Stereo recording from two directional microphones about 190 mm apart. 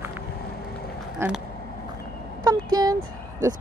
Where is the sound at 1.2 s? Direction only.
15° right (ahead or behind).